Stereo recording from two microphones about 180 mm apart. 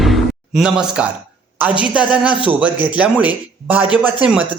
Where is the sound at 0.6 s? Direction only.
5° right (ahead or behind).